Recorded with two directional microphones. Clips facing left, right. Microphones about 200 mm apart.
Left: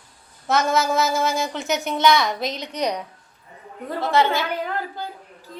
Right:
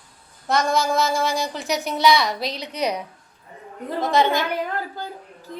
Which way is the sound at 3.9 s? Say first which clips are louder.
Right 1 dB; 15° right (ahead or behind).